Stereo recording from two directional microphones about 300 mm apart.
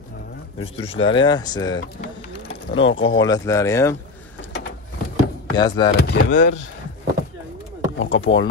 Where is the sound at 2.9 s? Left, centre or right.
Left.